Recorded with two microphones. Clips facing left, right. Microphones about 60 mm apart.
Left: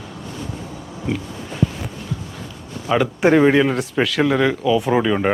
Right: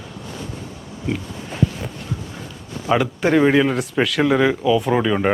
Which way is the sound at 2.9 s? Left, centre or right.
Centre.